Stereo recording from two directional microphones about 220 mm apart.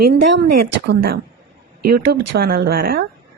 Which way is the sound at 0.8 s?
45° right (ahead or behind).